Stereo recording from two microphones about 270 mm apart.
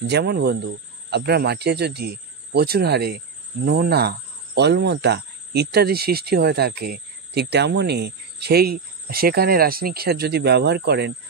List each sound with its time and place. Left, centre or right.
0.0 s speech: right